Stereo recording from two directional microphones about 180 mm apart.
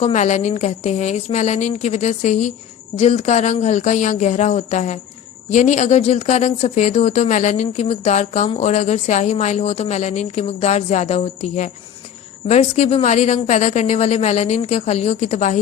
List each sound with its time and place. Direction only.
0.0 s a woman's voice: 40° left (ahead or behind)